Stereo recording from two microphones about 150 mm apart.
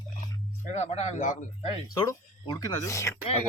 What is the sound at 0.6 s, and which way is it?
Speech, 50° left (ahead or behind).